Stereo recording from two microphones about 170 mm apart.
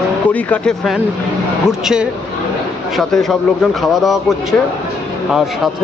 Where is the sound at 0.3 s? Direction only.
5° left (ahead or behind).